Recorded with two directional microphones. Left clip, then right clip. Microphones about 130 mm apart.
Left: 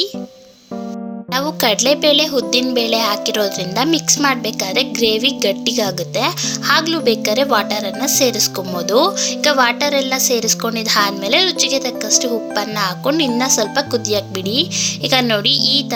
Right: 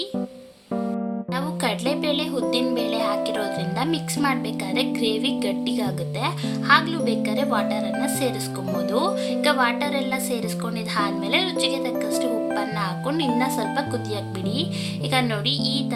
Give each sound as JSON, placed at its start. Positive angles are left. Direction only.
{"t": 1.3, "sound": "speech", "side_deg": 60}